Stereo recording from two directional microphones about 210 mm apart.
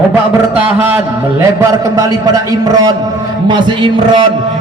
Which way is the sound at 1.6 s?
15° right (ahead or behind).